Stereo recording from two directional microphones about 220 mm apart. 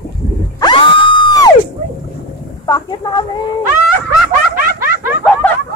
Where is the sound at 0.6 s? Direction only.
20° left (ahead or behind).